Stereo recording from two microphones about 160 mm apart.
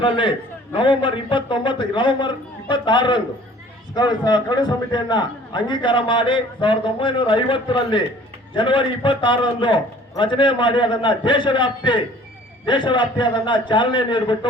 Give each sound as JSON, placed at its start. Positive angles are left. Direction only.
{"t": 0.0, "sound": "a man's voice", "side_deg": 30}